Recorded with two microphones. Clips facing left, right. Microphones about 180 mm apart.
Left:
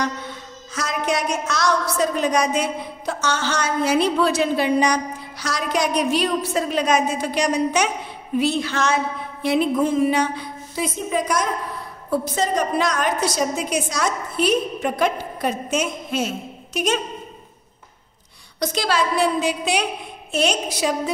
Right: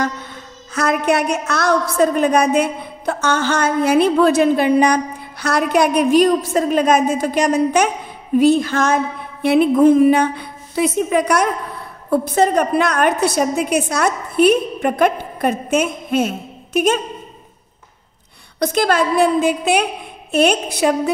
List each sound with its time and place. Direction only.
0.7 s a woman's voice: 60° right (ahead or behind)
18.6 s a woman's voice: 55° right (ahead or behind)